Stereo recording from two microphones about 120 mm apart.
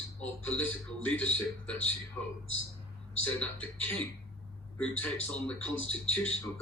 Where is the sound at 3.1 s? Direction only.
15° left (ahead or behind).